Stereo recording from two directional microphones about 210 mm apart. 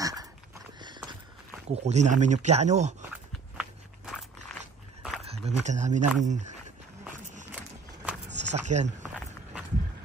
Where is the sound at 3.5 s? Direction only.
Centre (ahead or behind).